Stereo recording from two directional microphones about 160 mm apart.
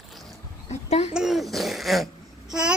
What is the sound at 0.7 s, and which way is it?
Speech, 45° left (ahead or behind).